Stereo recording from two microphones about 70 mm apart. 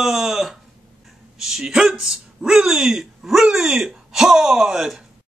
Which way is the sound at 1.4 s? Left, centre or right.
Centre.